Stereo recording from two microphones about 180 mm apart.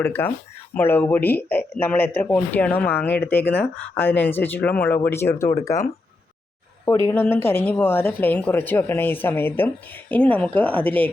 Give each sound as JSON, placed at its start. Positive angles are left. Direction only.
{"t": 0.0, "sound": "speech", "side_deg": 10}